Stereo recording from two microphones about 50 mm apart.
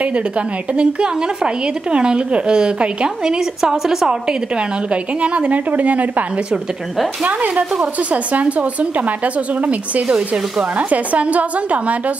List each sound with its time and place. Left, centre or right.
0.7 s a woman's voice: centre
10.1 s speech: centre